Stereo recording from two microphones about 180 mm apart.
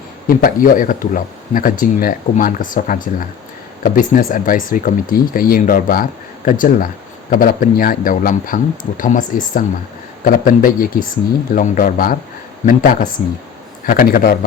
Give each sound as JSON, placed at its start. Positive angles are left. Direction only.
{"t": 0.3, "sound": "speech", "side_deg": 50}